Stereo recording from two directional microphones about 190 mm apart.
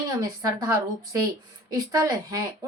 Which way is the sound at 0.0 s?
20° right (ahead or behind).